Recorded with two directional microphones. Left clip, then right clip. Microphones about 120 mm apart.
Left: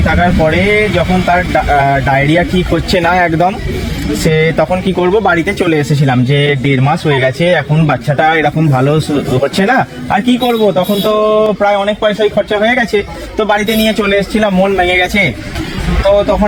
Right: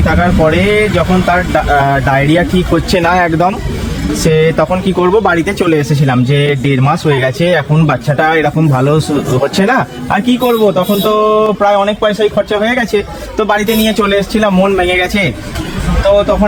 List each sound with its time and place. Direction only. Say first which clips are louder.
0.0 s a sound: even; 15° right (ahead or behind)
0.4 s a man's voice: right 2 dB; 15° right (ahead or behind)
14.8 s a man's voice: left 1 dB; 5° right (ahead or behind)